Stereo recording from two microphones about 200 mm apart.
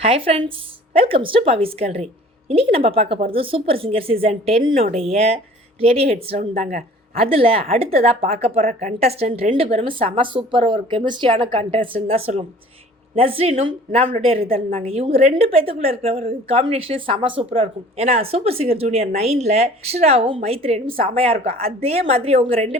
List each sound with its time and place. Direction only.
0.0 s a woman's voice: 30° right (ahead or behind)